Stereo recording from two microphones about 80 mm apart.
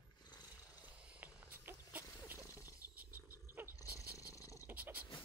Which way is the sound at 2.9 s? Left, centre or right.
Right.